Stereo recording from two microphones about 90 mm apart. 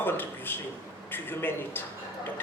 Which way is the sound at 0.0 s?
25° left (ahead or behind).